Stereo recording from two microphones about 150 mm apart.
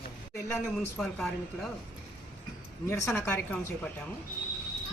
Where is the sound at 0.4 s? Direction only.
15° left (ahead or behind).